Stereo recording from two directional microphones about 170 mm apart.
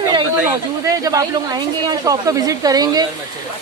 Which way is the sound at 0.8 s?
20° right (ahead or behind).